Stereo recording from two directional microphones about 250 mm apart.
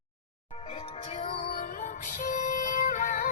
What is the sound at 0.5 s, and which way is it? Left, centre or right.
Music, left.